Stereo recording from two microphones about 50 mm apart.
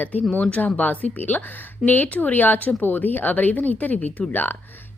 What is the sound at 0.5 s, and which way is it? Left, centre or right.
A woman's voice, left.